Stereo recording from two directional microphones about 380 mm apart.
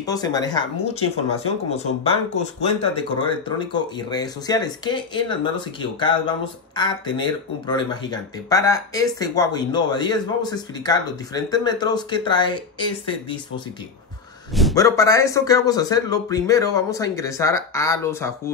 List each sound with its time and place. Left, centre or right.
0.0 s speech: centre
14.5 s speech: centre